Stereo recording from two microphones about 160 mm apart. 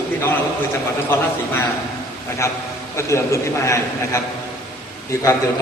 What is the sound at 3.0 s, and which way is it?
A man's voice, 20° left (ahead or behind).